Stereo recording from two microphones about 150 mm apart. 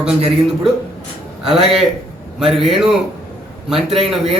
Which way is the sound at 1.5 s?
Centre (ahead or behind).